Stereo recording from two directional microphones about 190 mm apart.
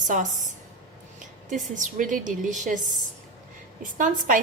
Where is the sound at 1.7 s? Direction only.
40° right (ahead or behind).